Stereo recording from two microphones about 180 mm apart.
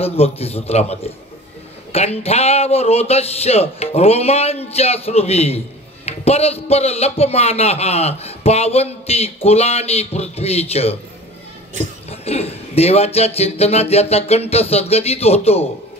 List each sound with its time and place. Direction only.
0.0 s speech: 35° left (ahead or behind)
12.1 s speech: 35° left (ahead or behind)